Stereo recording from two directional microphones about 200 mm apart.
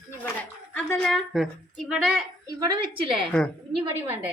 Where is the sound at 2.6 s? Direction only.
25° right (ahead or behind).